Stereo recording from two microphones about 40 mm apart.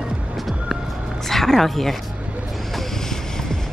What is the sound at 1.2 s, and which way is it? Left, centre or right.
Speech, centre.